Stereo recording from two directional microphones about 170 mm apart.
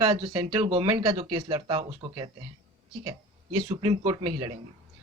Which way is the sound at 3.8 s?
30° right (ahead or behind).